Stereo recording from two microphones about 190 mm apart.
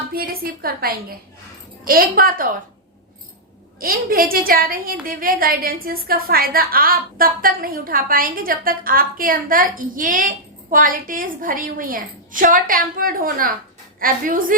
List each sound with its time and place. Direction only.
0.1 s a woman's voice: 50° right (ahead or behind)
3.8 s a woman's voice: 50° right (ahead or behind)